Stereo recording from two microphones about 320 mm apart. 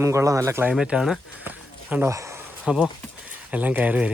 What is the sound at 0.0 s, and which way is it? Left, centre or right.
Speech, centre.